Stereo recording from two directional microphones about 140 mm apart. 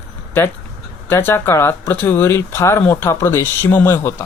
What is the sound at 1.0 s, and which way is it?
Speech, 15° left (ahead or behind).